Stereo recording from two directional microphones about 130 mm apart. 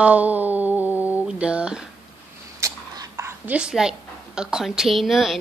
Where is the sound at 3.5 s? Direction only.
5° right (ahead or behind).